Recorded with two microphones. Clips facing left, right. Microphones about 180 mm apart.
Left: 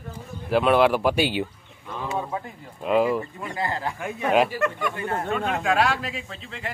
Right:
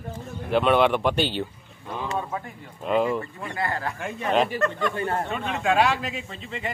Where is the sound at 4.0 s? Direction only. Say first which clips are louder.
Left 2 dB; 5° left (ahead or behind).